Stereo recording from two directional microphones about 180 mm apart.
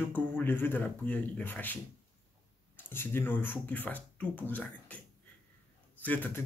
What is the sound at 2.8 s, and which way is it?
Speech, 10° left (ahead or behind).